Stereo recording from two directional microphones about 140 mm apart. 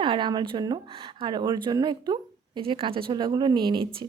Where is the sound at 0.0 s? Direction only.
35° right (ahead or behind).